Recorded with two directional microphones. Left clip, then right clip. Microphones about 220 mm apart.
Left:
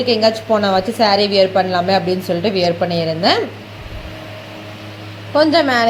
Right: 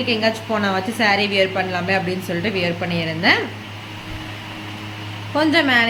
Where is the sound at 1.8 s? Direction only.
20° left (ahead or behind).